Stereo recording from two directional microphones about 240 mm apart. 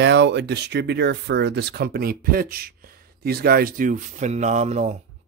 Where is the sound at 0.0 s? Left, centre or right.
Right.